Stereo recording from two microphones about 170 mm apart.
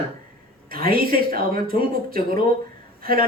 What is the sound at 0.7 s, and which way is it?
A man's voice, 60° right (ahead or behind).